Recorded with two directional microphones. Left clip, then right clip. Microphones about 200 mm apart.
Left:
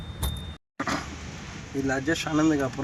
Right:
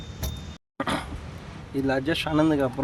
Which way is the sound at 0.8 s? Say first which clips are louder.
Right 1 dB; 45° right (ahead or behind).